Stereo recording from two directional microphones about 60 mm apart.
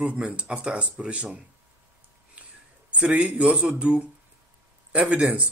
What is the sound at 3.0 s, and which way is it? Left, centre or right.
Speech, centre.